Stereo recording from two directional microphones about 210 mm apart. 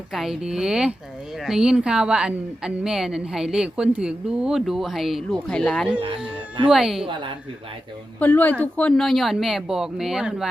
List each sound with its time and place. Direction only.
0.1 s a woman's voice: centre (ahead or behind)
5.9 s speech: 25° right (ahead or behind)
6.7 s a woman's voice: centre (ahead or behind)
8.2 s a woman's voice: 5° left (ahead or behind)